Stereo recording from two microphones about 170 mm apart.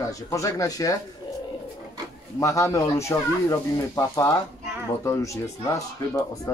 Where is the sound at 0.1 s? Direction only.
20° left (ahead or behind).